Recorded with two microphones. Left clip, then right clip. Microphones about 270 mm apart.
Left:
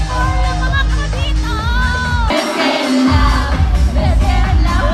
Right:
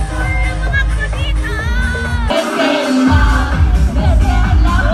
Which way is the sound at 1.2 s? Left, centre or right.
Centre.